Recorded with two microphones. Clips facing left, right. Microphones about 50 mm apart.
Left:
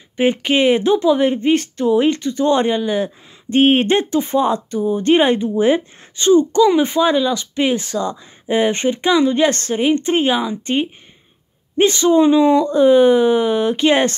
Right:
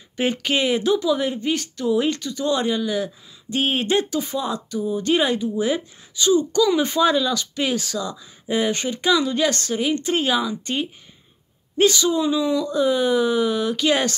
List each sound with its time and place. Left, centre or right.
0.2 s speech: left